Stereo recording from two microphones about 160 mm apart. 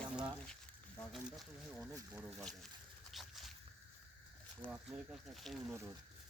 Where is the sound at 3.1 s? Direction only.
Centre (ahead or behind).